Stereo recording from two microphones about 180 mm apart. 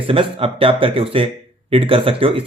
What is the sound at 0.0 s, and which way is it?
A man's voice, 30° right (ahead or behind).